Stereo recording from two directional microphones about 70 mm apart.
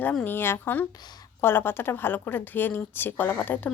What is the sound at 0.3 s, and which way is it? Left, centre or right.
A woman's voice, left.